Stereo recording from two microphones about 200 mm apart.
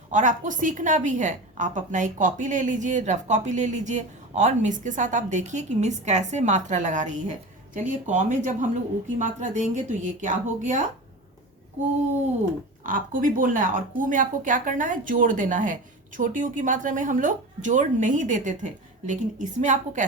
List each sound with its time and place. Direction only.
0.1 s a woman's voice: 40° right (ahead or behind)
12.8 s a woman's voice: 45° right (ahead or behind)